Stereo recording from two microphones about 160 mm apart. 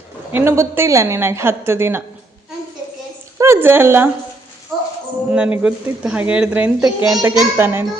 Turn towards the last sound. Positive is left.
turn(degrees=-15)  # may be behind; listen again after turning